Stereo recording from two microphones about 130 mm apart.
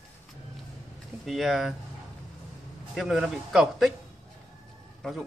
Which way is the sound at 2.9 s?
5° right (ahead or behind).